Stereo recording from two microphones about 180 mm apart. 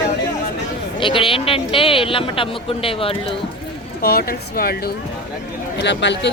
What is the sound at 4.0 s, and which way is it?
Speech, 55° left (ahead or behind).